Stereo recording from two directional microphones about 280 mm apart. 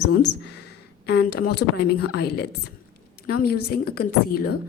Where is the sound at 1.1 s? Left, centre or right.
Left.